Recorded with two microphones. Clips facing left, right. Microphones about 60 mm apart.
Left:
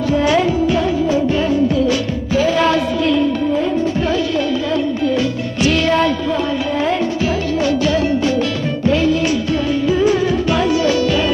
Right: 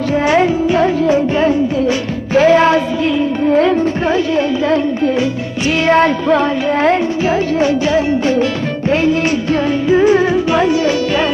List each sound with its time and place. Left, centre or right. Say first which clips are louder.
0.1 s music: right 3 dB; right
2.6 s a sound: right 3 dB; right
4.0 s music: right 3 dB; right
7.2 s music: right 4 dB; right